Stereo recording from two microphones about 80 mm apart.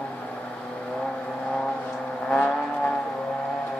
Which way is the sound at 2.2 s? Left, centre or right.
Centre.